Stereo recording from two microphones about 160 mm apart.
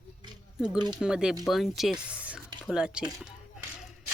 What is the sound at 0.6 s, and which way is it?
Speech, 5° right (ahead or behind).